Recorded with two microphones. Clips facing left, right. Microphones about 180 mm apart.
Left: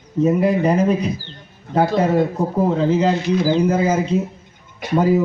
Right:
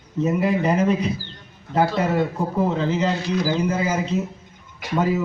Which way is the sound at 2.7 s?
30° left (ahead or behind).